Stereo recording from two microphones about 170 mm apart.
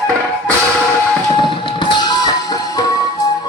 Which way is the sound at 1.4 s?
25° left (ahead or behind).